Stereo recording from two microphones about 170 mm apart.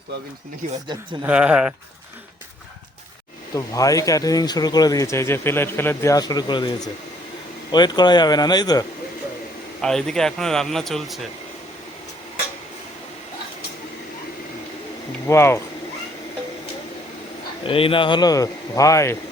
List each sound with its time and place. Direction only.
1.2 s speech: 5° right (ahead or behind)
3.5 s speech: 20° left (ahead or behind)
9.8 s speech: 5° left (ahead or behind)
15.3 s speech: 15° left (ahead or behind)
17.7 s speech: 30° left (ahead or behind)